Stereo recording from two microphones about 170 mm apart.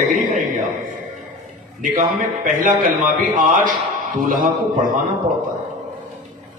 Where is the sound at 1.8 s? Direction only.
50° right (ahead or behind).